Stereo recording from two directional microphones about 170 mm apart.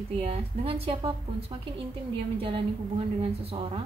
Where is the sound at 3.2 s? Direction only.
30° right (ahead or behind).